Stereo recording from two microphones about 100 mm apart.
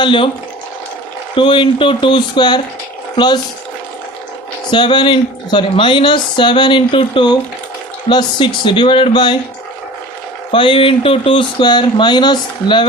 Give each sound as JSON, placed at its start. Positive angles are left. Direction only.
{"t": 0.0, "sound": "speech", "side_deg": 55}
{"t": 1.4, "sound": "speech", "side_deg": 55}
{"t": 4.7, "sound": "speech", "side_deg": 50}
{"t": 10.5, "sound": "speech", "side_deg": 60}